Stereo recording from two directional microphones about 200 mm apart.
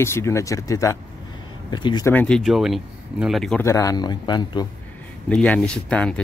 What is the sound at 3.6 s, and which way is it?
Speech, 15° left (ahead or behind).